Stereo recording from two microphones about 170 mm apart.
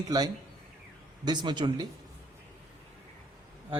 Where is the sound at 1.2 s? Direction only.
25° right (ahead or behind).